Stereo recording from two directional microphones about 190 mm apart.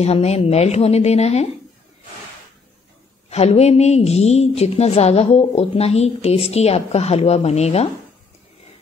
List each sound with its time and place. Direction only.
0.0 s a woman's voice: 35° left (ahead or behind)
3.3 s a woman's voice: 35° left (ahead or behind)